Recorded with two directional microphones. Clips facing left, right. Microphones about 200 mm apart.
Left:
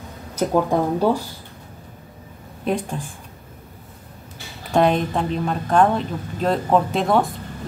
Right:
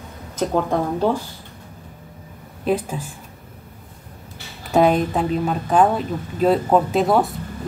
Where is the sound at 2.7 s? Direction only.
5° right (ahead or behind).